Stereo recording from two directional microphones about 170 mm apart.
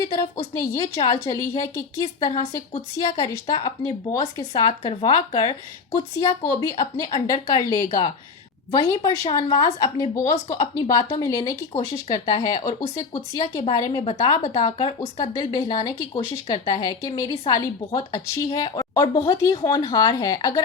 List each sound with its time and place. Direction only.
0.2 s a woman's voice: 20° left (ahead or behind)
0.9 s a woman's voice: 35° left (ahead or behind)
1.2 s a woman's voice: 20° left (ahead or behind)